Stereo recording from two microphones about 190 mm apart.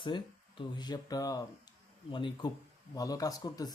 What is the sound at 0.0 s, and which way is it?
A man's voice, 25° left (ahead or behind).